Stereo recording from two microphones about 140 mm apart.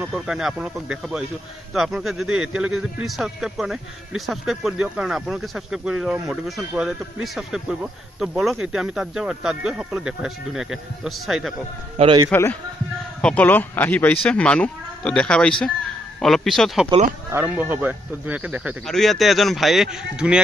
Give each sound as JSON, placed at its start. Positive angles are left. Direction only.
{"t": 0.0, "sound": "a man's voice", "side_deg": -5}
{"t": 12.3, "sound": "a man's voice", "side_deg": 15}
{"t": 17.3, "sound": "speech", "side_deg": -15}
{"t": 18.9, "sound": "a man's voice", "side_deg": 0}